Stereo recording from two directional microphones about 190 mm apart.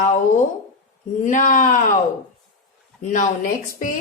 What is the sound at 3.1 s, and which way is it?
Speech, 40° left (ahead or behind).